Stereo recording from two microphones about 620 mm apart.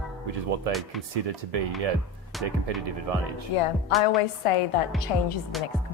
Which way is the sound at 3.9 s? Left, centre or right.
Left.